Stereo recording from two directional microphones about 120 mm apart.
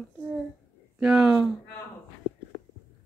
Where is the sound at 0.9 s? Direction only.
5° right (ahead or behind).